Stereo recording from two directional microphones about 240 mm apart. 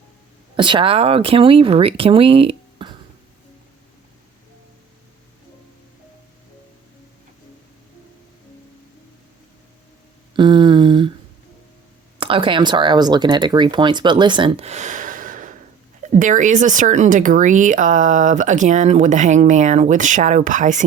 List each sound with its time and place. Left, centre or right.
0.5 s speech: right
10.3 s a sound: centre
12.2 s speech: right